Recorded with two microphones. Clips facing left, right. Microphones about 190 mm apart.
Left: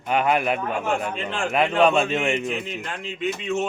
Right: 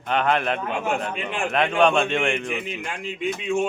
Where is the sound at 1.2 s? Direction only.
15° right (ahead or behind).